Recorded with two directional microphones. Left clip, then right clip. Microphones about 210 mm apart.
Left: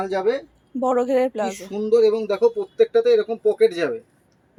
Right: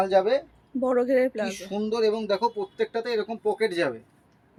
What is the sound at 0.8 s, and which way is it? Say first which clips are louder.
Speech: left 3 dB; 10° left (ahead or behind).